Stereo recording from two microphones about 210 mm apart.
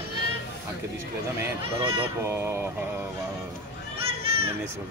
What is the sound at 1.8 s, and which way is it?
Speech, 25° right (ahead or behind).